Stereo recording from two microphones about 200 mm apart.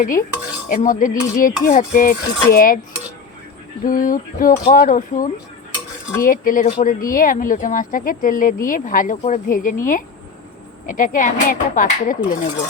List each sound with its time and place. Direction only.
0.0 s speech: 45° left (ahead or behind)
3.8 s speech: 45° left (ahead or behind)